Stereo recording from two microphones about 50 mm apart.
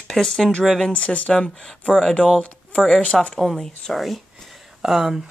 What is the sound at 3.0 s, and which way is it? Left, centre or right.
Speech, left.